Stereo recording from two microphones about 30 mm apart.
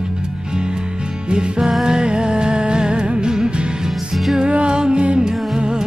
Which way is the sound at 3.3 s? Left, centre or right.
Right.